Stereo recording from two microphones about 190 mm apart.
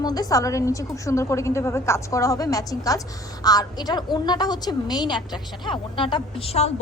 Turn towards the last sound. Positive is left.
turn(degrees=30)  # may be behind; listen again after turning